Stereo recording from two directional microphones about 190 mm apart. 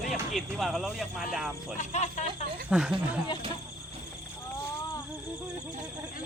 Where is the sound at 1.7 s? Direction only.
40° left (ahead or behind).